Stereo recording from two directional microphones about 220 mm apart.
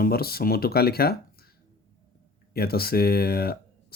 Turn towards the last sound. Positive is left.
turn(degrees=45)  # may be behind; listen again after turning